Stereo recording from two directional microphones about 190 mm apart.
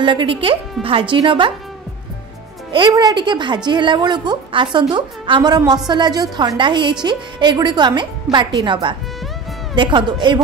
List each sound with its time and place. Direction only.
0.0 s a woman's voice: 25° right (ahead or behind)
2.7 s a woman's voice: 25° right (ahead or behind)
9.8 s a woman's voice: 25° right (ahead or behind)